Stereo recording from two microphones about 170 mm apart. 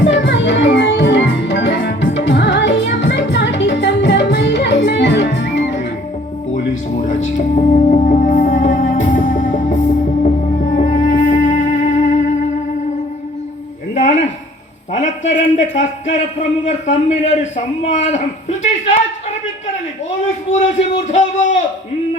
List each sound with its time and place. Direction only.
0.0 s music: 90° left
6.5 s music: 45° left (ahead or behind)
13.9 s a sound: 45° left (ahead or behind)
20.5 s a man's voice: 45° left (ahead or behind)